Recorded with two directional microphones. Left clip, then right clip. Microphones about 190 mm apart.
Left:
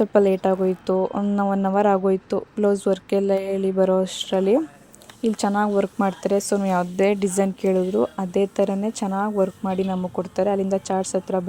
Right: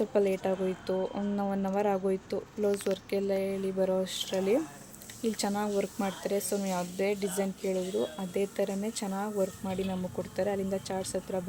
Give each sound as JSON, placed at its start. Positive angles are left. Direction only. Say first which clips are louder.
{"t": 0.0, "sound": "speech", "louder": "left 10 dB", "side_deg": 30}